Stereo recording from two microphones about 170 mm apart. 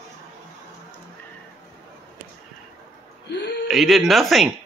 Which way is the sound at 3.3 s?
80° left.